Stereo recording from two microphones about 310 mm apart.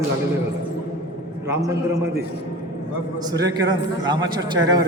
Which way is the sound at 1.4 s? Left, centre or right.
Centre.